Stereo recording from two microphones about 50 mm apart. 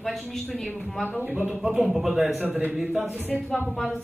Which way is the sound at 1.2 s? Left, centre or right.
Right.